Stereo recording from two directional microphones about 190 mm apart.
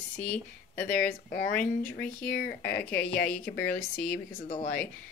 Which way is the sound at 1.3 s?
50° left (ahead or behind).